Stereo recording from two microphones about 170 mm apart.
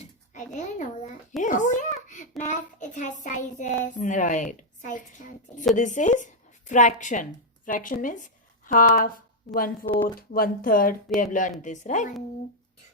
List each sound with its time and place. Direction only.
0.0 s a child's voice: 45° left (ahead or behind)
9.8 s speech: 35° left (ahead or behind)
10.2 s a child's voice: 60° left (ahead or behind)